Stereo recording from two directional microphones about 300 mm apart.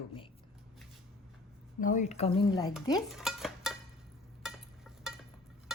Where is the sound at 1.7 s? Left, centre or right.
Left.